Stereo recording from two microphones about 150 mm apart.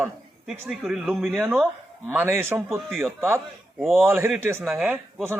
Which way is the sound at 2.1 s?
15° right (ahead or behind).